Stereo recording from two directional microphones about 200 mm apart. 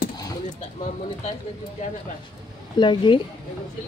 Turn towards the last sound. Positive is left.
turn(degrees=25)  # may be behind; listen again after turning